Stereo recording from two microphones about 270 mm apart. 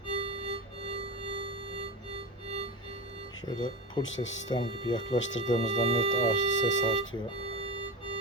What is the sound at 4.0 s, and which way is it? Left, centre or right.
Speech, left.